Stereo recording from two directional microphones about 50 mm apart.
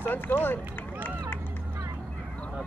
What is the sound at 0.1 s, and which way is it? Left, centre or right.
Speech, left.